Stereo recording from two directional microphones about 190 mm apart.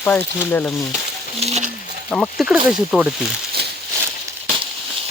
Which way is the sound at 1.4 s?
35° right (ahead or behind).